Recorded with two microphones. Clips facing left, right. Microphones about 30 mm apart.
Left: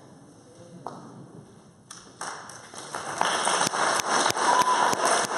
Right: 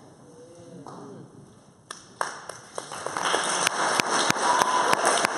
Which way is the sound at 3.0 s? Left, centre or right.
Centre.